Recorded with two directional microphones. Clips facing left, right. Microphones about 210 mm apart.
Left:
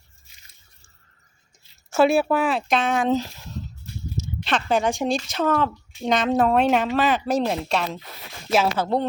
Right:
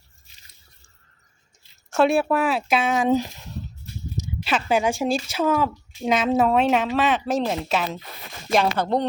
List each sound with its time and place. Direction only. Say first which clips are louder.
1.9 s speech: left 1 dB; centre (ahead or behind)